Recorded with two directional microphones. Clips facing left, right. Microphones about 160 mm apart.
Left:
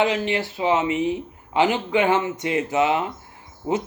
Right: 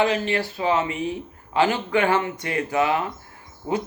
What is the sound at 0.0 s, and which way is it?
Speech, 20° left (ahead or behind).